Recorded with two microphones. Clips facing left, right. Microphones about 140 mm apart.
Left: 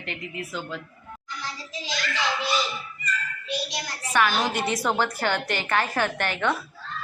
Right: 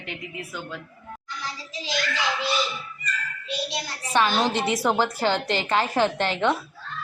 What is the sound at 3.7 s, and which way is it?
A woman's voice, 25° right (ahead or behind).